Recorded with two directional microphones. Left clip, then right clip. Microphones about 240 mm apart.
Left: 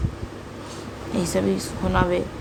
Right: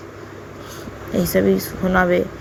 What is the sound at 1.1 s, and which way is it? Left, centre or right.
Speech, centre.